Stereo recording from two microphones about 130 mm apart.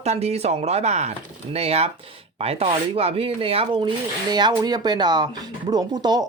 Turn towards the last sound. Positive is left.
turn(degrees=-30)  # may be behind; listen again after turning